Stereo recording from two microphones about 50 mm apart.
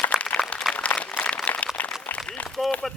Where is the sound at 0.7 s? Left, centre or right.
Left.